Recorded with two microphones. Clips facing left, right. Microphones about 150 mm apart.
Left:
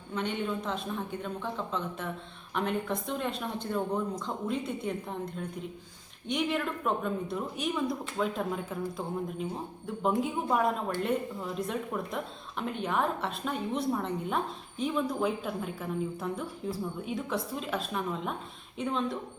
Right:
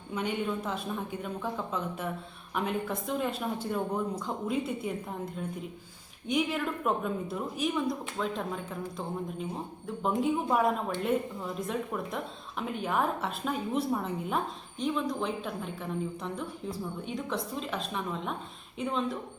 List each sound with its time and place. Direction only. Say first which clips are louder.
0.1 s a woman's voice: right 1 dB; 10° right (ahead or behind)